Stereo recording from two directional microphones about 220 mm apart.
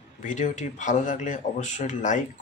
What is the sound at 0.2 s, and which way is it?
A man's voice, 35° left (ahead or behind).